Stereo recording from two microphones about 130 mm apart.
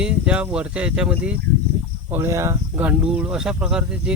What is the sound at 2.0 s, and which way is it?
Speech, 20° right (ahead or behind).